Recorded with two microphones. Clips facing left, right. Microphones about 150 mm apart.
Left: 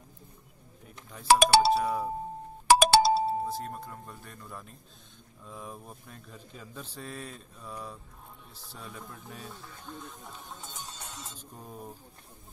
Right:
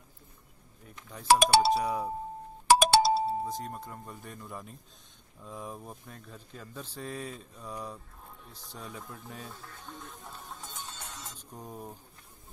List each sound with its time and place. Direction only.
1.2 s speech: 70° left (ahead or behind)
1.8 s a man's voice: centre (ahead or behind)
2.7 s music: 75° left (ahead or behind)
3.4 s a man's voice: 5° left (ahead or behind)
6.8 s a man's voice: 10° right (ahead or behind)